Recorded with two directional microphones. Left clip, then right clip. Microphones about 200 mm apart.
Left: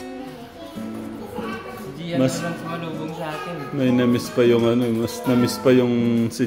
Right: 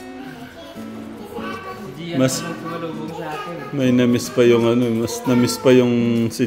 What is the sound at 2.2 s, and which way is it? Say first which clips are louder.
Speech: right 2 dB; 30° right (ahead or behind).